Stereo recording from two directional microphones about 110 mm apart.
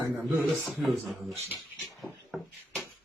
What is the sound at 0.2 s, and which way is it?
Speech, centre (ahead or behind).